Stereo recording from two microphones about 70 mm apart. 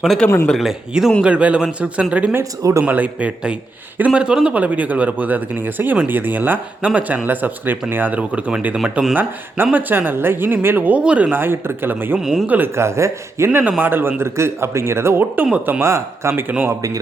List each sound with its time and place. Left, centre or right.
0.1 s speech: centre
1.2 s a man's voice: centre
2.4 s speech: right
2.8 s a man's voice: right
9.7 s speech: right
11.3 s speech: right
12.2 s speech: centre
12.5 s speech: right
12.7 s speech: right
13.5 s speech: right
15.5 s speech: right
15.8 s speech: right
16.3 s speech: right
16.6 s speech: right